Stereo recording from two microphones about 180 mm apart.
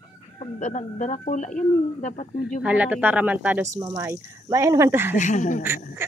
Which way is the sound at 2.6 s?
10° right (ahead or behind).